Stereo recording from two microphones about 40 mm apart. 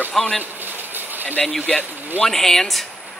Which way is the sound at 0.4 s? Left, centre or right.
Right.